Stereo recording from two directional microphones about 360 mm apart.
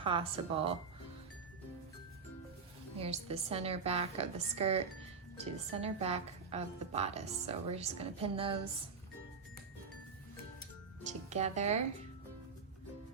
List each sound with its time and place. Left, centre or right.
0.0 s a woman's voice: centre
3.0 s a woman's voice: centre
11.0 s speech: centre